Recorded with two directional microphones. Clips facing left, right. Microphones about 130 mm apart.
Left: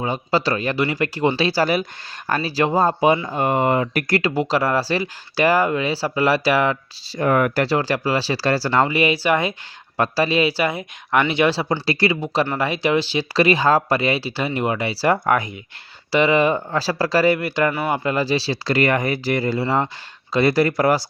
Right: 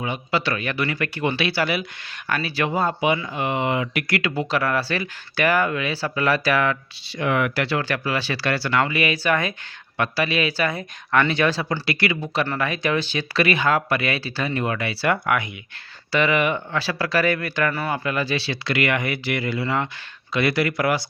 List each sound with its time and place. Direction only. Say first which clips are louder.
0.0 s speech: left 4 dB; 35° left (ahead or behind)
7.2 s speech: left 4 dB; 40° left (ahead or behind)